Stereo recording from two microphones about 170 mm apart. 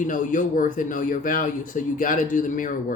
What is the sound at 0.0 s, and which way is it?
Speech, 50° left (ahead or behind).